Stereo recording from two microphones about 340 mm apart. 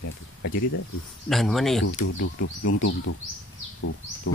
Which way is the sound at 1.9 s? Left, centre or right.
Left.